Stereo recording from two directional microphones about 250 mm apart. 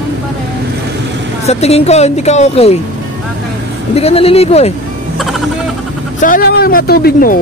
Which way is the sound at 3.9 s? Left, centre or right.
Left.